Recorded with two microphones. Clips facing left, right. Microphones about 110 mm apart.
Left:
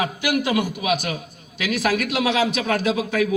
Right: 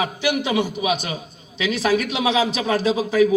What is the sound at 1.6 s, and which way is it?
A man's voice, 25° right (ahead or behind).